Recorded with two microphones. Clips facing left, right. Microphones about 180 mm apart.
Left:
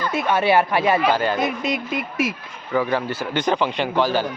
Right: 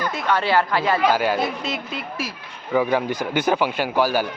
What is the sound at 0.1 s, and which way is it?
Speech, 20° left (ahead or behind).